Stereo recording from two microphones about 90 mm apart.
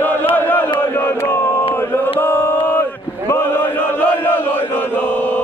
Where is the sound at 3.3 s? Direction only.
25° left (ahead or behind).